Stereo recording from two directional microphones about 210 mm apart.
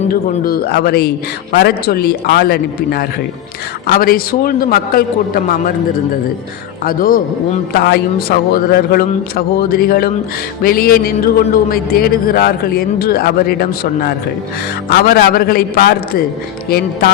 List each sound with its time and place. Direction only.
0.1 s a man's voice: 45° left (ahead or behind)
6.8 s a man's voice: 45° left (ahead or behind)